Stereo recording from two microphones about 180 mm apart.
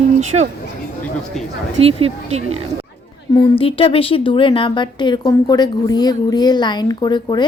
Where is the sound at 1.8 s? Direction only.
30° right (ahead or behind).